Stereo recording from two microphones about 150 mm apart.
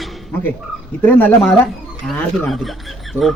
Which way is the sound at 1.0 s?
15° left (ahead or behind).